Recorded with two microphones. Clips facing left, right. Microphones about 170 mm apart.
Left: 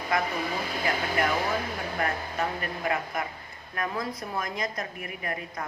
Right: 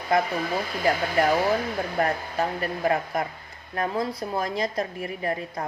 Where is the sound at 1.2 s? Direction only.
35° right (ahead or behind).